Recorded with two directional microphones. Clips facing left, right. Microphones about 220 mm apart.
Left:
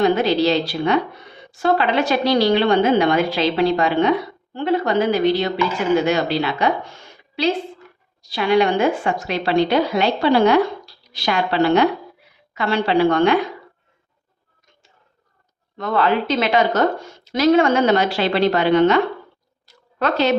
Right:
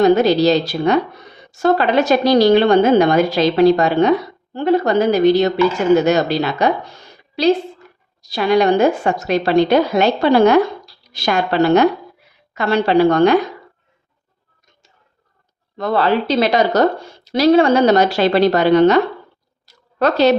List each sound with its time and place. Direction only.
0.0 s a woman's voice: 40° right (ahead or behind)
15.8 s speech: 35° right (ahead or behind)
19.6 s a sound: 40° right (ahead or behind)